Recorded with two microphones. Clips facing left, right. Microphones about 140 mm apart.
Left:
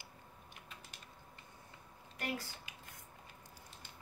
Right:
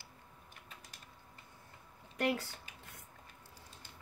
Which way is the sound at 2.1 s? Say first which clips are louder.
Right 7 dB; 70° right (ahead or behind).